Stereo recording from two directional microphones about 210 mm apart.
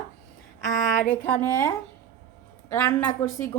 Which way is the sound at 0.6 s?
40° left (ahead or behind).